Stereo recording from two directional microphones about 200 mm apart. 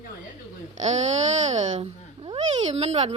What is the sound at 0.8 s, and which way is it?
A woman's voice, 35° right (ahead or behind).